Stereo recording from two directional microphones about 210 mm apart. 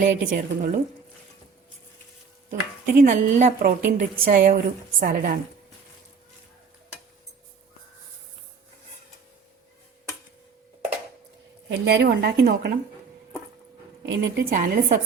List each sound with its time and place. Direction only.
0.0 s speech: 40° right (ahead or behind)
2.5 s a woman's voice: 40° right (ahead or behind)
11.9 s a woman's voice: 50° right (ahead or behind)
14.0 s a woman's voice: 45° right (ahead or behind)